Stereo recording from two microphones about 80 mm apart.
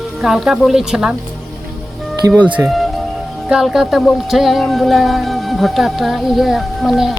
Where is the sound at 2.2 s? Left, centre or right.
Right.